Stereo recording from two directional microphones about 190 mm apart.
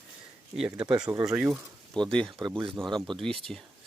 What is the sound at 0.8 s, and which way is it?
Speech, 5° right (ahead or behind).